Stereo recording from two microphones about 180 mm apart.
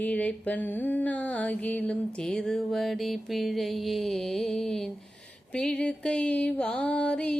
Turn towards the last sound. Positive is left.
turn(degrees=5)  # may be behind; listen again after turning